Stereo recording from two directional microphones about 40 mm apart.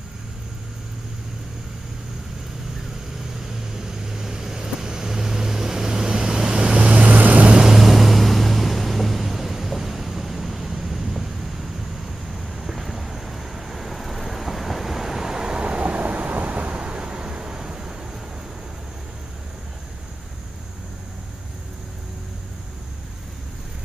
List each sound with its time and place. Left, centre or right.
3.7 s vehicle: centre; by 7.5 s right
7.7 s vehicle: centre